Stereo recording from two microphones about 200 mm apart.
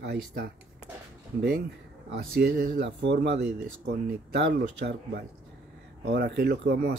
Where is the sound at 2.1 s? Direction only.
50° right (ahead or behind).